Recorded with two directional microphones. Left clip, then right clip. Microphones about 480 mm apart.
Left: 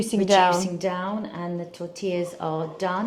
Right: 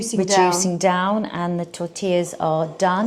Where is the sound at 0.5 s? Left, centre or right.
Right.